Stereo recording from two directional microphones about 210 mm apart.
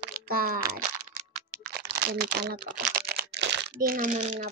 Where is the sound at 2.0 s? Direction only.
45° right (ahead or behind).